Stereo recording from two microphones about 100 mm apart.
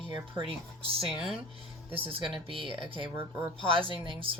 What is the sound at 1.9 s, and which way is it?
Speech, 65° right (ahead or behind).